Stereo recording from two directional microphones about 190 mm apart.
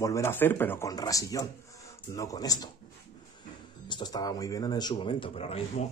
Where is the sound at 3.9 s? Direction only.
20° left (ahead or behind).